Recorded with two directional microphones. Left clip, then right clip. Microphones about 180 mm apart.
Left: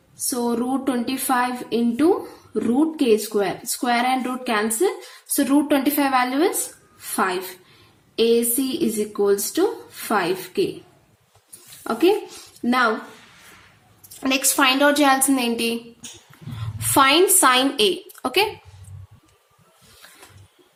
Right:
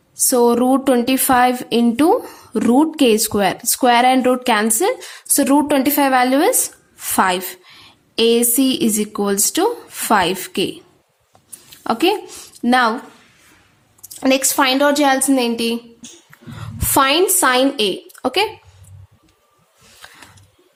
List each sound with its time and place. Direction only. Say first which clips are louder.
0.3 s a woman's voice: right 10 dB; 60° right (ahead or behind)
7.8 s a sound: right 4 dB; 55° right (ahead or behind)
9.1 s speech: left 1 dB; 60° right (ahead or behind)
11.8 s a woman's voice: right 2 dB; 55° right (ahead or behind)
14.2 s a woman's voice: right 4 dB; 40° right (ahead or behind)
16.8 s a woman's voice: right 1 dB; 30° right (ahead or behind)